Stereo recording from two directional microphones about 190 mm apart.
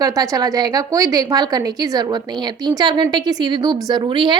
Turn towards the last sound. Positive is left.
turn(degrees=-25)  # may be behind; listen again after turning